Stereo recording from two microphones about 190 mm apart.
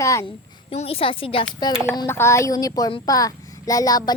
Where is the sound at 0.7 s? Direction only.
30° left (ahead or behind).